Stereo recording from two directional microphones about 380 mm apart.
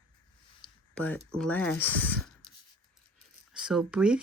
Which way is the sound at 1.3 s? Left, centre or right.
Centre.